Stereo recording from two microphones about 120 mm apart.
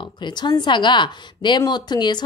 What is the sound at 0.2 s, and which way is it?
A woman's voice, 35° left (ahead or behind).